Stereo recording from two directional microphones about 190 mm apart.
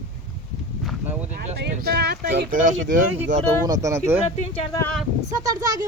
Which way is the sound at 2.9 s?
45° right (ahead or behind).